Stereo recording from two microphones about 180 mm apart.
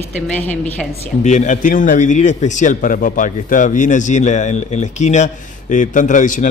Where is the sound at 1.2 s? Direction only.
40° left (ahead or behind).